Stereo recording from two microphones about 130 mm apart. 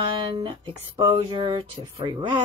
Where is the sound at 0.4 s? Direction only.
35° right (ahead or behind).